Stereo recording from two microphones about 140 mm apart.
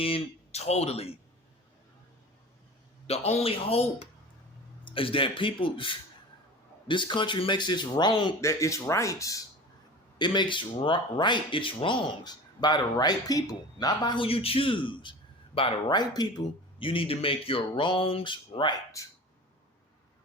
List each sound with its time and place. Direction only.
0.0 s speech: 45° left (ahead or behind)
3.1 s speech: 50° left (ahead or behind); by 8.3 s 35° left (ahead or behind)
8.4 s speech: 20° left (ahead or behind)
10.2 s speech: 35° left (ahead or behind)